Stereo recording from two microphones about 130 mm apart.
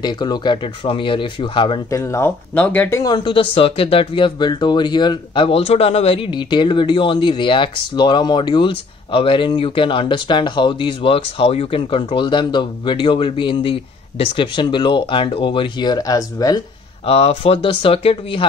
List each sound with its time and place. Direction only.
0.0 s speech: 35° left (ahead or behind)
1.9 s speech: 20° left (ahead or behind)
3.0 s speech: 35° left (ahead or behind)
17.0 s speech: 50° left (ahead or behind)